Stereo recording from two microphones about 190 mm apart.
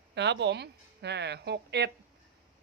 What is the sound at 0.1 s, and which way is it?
Speech, 65° right (ahead or behind).